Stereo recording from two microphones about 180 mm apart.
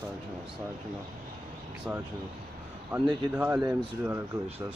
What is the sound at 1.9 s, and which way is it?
Speech, 10° right (ahead or behind).